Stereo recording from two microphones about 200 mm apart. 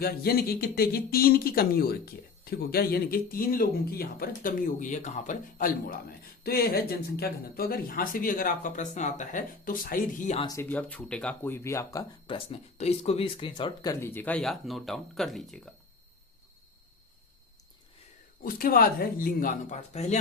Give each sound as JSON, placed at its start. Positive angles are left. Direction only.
{"t": 0.0, "sound": "a man's voice", "side_deg": 50}
{"t": 4.4, "sound": "a man's voice", "side_deg": 40}
{"t": 10.4, "sound": "speech", "side_deg": 15}
{"t": 12.5, "sound": "speech", "side_deg": 30}
{"t": 18.4, "sound": "a man's voice", "side_deg": 45}